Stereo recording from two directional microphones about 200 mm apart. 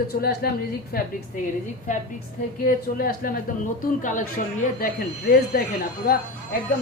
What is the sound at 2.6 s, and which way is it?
Speech, 45° left (ahead or behind).